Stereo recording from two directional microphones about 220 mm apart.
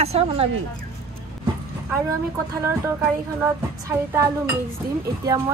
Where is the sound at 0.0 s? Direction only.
30° right (ahead or behind).